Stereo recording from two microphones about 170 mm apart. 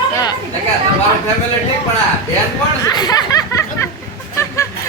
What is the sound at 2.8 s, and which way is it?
Speech, 20° left (ahead or behind).